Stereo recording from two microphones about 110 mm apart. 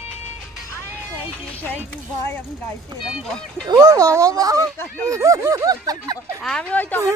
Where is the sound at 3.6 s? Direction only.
35° right (ahead or behind).